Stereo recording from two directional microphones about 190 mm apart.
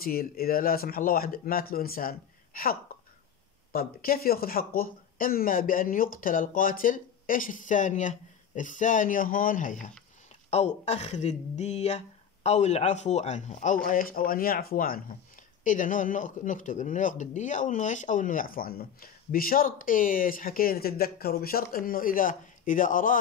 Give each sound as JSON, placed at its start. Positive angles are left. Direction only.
{"t": 0.0, "sound": "speech", "side_deg": 50}
{"t": 13.8, "sound": "speech", "side_deg": 50}